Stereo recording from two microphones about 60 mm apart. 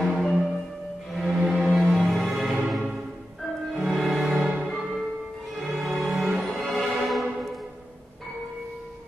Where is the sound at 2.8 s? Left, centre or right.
Centre.